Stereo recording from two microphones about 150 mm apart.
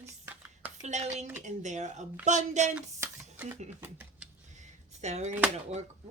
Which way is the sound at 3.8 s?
15° right (ahead or behind).